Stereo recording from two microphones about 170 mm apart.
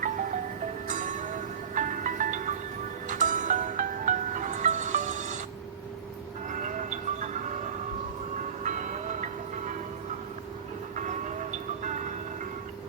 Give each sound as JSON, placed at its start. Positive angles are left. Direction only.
{"t": 0.9, "sound": "music", "side_deg": -45}
{"t": 6.5, "sound": "a sound", "side_deg": -45}
{"t": 8.6, "sound": "music", "side_deg": -45}
{"t": 10.9, "sound": "music", "side_deg": -45}